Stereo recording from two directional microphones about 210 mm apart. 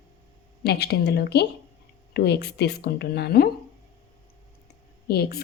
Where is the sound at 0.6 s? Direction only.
50° left (ahead or behind).